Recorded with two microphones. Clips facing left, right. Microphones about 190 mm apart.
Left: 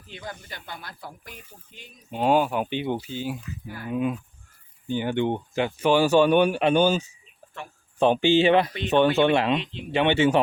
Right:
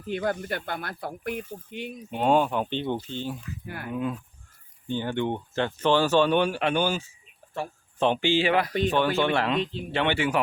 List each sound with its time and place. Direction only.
0.1 s speech: 55° right (ahead or behind)
2.1 s speech: 5° left (ahead or behind); by 10.4 s 25° left (ahead or behind)